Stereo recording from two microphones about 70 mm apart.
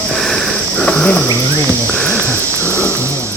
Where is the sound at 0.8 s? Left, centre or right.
Centre.